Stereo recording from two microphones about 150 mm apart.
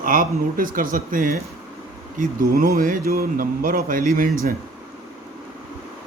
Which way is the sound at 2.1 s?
70° right (ahead or behind).